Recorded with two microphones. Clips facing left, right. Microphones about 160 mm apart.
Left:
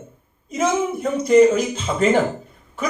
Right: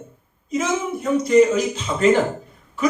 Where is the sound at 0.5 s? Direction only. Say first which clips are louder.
Left 2 dB; 50° left (ahead or behind).